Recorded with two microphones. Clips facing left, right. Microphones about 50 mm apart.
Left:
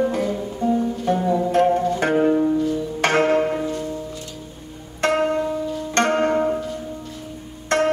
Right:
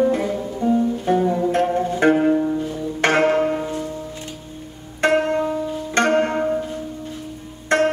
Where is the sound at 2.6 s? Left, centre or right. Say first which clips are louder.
Left 1 dB; right.